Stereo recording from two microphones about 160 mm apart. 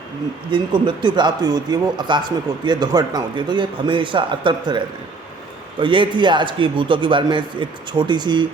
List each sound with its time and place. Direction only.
0.5 s a man's voice: 30° right (ahead or behind)
5.8 s a man's voice: 30° right (ahead or behind)